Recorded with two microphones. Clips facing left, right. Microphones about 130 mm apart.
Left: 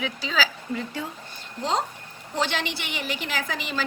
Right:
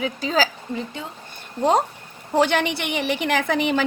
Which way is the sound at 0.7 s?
25° right (ahead or behind).